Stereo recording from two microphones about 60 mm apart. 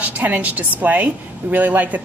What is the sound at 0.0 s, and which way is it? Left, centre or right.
A woman's voice, right.